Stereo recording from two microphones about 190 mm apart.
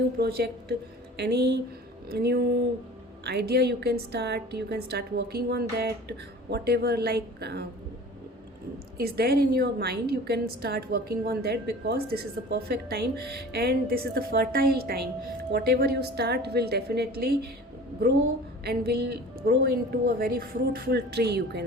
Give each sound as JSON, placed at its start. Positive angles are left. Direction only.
{"t": 0.2, "sound": "a woman's voice", "side_deg": -55}
{"t": 9.0, "sound": "a woman's voice", "side_deg": -55}
{"t": 18.6, "sound": "a woman's voice", "side_deg": -55}